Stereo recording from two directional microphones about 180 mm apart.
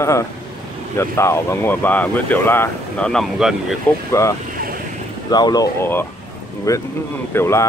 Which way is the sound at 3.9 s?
15° left (ahead or behind).